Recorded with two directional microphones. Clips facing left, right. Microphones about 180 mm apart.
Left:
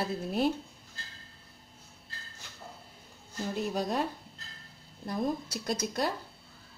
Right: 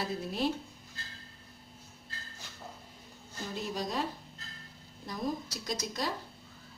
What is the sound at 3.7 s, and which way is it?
Speech, 60° left (ahead or behind).